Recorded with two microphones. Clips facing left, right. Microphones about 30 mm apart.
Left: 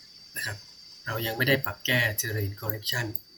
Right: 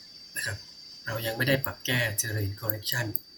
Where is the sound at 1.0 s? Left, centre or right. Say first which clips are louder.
Left 1 dB; centre.